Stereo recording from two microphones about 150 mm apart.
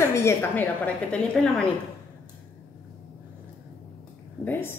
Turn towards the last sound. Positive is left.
turn(degrees=15)  # may be behind; listen again after turning